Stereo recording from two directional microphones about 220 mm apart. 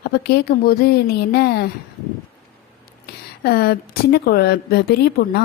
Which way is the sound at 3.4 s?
45° left (ahead or behind).